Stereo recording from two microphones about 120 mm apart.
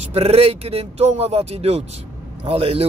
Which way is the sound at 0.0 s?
60° right (ahead or behind).